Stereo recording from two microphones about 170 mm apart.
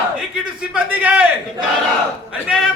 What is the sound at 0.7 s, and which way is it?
Speech, 10° right (ahead or behind).